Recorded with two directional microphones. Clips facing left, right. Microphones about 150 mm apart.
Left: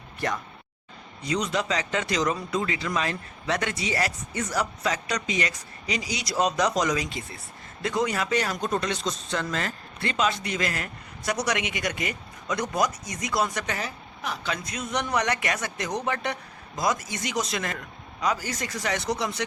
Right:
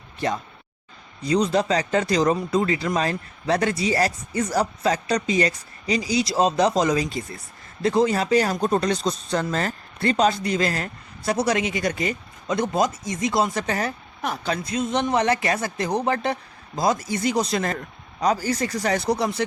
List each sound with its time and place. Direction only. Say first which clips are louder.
1.2 s speech: right 7 dB; 35° right (ahead or behind)
13.7 s speech: right 7 dB; 45° right (ahead or behind)